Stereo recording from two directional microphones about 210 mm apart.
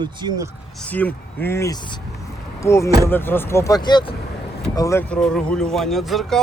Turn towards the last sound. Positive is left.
turn(degrees=0)  # may be behind; listen again after turning